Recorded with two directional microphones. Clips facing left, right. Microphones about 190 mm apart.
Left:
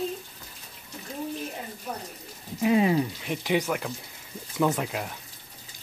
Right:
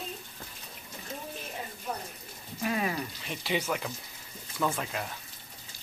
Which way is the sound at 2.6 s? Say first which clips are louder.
Left 9 dB; 20° left (ahead or behind).